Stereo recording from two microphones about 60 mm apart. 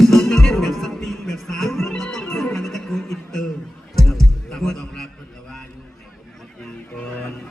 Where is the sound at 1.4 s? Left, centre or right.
Centre.